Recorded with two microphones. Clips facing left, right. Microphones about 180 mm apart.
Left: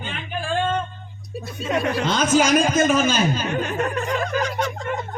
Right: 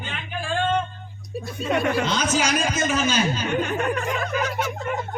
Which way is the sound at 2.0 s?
55° left (ahead or behind).